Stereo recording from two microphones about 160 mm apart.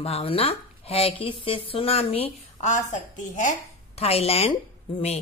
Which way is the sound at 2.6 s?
50° left (ahead or behind).